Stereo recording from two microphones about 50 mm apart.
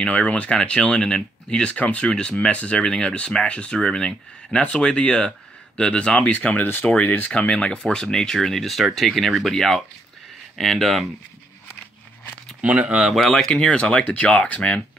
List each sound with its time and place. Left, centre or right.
0.0 s speech: left
6.3 s speech: left
6.9 s speech: left; by 11.1 s centre
12.6 s speech: right
13.1 s speech: centre; by 14.8 s left